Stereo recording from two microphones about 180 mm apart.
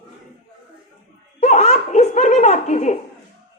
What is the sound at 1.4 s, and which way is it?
A woman's voice, 40° left (ahead or behind).